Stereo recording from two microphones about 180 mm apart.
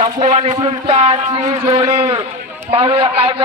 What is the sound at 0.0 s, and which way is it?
Speech, 40° right (ahead or behind).